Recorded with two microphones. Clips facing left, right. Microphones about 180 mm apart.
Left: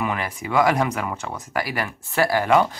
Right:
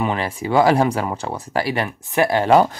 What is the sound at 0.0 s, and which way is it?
Speech, 30° right (ahead or behind).